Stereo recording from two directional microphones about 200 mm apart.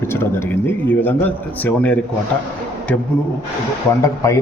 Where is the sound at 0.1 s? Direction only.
10° left (ahead or behind).